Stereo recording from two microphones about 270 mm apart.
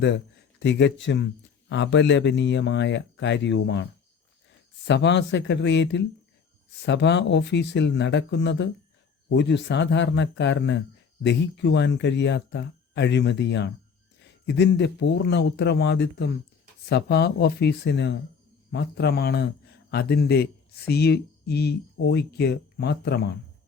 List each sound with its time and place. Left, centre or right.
0.6 s speech: left
4.9 s speech: left